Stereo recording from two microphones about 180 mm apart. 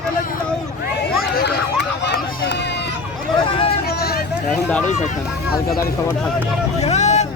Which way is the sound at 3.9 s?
60° left (ahead or behind).